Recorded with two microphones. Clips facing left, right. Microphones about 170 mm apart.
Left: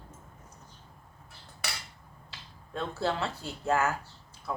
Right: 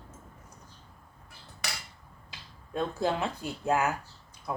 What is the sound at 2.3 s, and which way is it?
Speech, 15° right (ahead or behind).